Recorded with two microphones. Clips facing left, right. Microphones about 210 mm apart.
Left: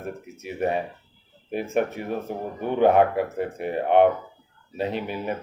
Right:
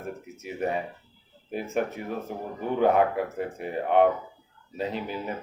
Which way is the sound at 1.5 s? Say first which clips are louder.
Left 4 dB; 70° left (ahead or behind).